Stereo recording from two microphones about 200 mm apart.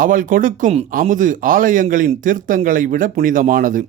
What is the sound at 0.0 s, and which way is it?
Speech, 40° right (ahead or behind).